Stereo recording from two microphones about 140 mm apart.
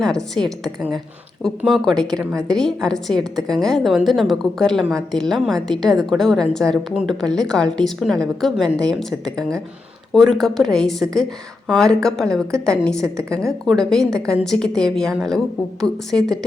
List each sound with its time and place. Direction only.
0.0 s a woman's voice: 5° left (ahead or behind)